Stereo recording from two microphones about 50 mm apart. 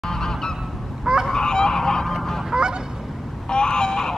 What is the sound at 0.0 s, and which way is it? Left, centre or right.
Goose, centre.